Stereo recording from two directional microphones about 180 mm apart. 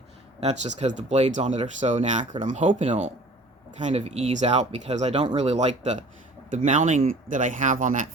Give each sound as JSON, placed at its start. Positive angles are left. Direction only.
{"t": 0.6, "sound": "speech", "side_deg": -40}
{"t": 2.3, "sound": "speech", "side_deg": -30}